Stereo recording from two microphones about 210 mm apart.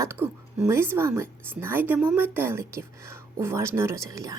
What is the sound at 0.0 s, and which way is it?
A woman's voice, 10° right (ahead or behind).